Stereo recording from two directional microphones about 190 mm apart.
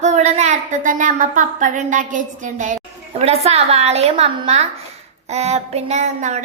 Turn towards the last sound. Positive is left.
turn(degrees=-40)  # may be behind; listen again after turning